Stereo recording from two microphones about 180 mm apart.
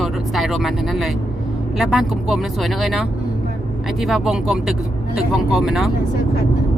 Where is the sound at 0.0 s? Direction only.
Centre (ahead or behind).